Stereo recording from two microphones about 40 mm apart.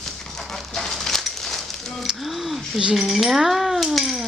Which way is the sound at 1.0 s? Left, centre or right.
Centre.